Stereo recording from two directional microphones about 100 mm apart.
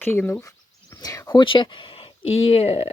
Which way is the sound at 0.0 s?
20° left (ahead or behind).